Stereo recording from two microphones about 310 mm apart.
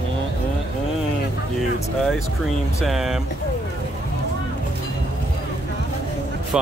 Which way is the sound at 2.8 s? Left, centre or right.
Centre.